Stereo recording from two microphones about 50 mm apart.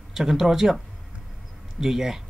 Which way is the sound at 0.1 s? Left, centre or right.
Centre.